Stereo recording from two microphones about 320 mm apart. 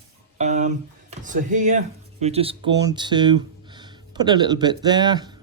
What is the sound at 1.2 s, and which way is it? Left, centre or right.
Speech, right.